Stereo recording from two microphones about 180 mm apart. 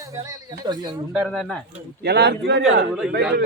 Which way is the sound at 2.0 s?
65° right (ahead or behind).